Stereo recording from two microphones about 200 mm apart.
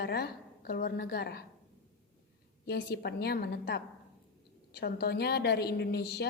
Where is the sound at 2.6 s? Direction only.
50° left (ahead or behind).